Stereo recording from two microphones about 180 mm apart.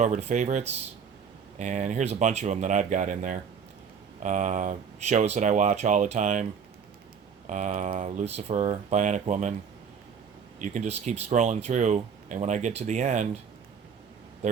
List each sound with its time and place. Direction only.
0.0 s speech: 40° right (ahead or behind)
7.4 s speech: 40° right (ahead or behind)
10.6 s speech: 40° right (ahead or behind)